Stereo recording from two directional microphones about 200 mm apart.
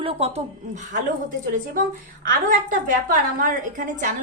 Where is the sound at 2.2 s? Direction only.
45° right (ahead or behind).